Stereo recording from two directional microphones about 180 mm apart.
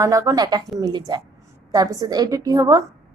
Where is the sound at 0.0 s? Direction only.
15° right (ahead or behind).